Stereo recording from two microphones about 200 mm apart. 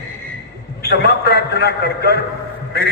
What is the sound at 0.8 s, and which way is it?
A man's voice, 55° left (ahead or behind).